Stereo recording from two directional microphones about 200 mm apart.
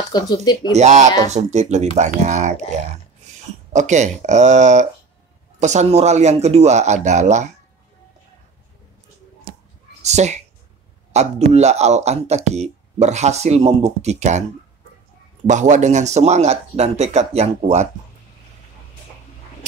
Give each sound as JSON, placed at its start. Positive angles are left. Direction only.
{"t": 0.1, "sound": "speech", "side_deg": 20}
{"t": 0.7, "sound": "speech", "side_deg": -35}
{"t": 3.7, "sound": "speech", "side_deg": -35}
{"t": 10.0, "sound": "a man's voice", "side_deg": -35}
{"t": 15.4, "sound": "speech", "side_deg": -35}